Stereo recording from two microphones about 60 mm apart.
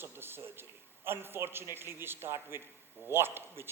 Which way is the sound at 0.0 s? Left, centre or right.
Right.